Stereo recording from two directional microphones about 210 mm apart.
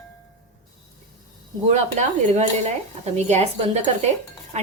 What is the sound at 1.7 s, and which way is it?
Speech, 35° right (ahead or behind).